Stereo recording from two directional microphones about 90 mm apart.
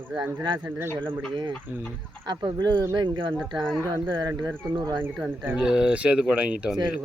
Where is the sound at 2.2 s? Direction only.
55° right (ahead or behind).